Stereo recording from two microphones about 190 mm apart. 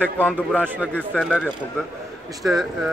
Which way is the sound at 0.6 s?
10° right (ahead or behind).